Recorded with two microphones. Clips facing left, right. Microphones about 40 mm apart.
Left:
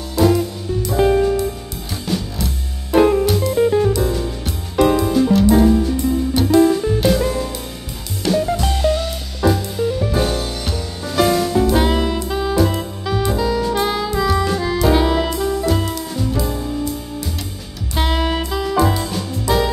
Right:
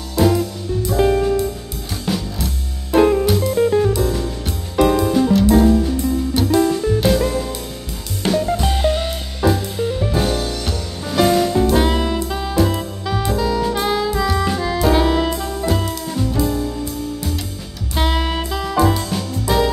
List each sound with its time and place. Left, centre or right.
0.2 s music: centre
8.3 s drum kit: centre
8.5 s music: centre
9.4 s music: centre
10.1 s music: centre
17.9 s music: centre